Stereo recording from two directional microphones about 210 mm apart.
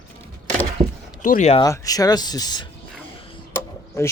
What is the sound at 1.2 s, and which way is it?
Speech, 40° left (ahead or behind).